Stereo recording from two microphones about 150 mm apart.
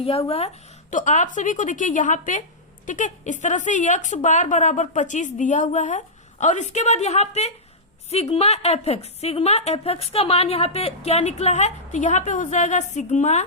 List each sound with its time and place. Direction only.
0.0 s a woman's voice: 40° left (ahead or behind)